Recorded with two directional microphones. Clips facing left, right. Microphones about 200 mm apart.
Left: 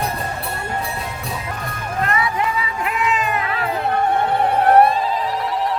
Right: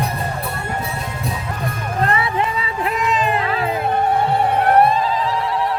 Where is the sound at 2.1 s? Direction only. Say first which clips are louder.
Left 1 dB; 25° right (ahead or behind).